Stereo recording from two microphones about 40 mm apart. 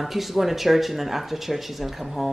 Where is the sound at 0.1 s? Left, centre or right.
Centre.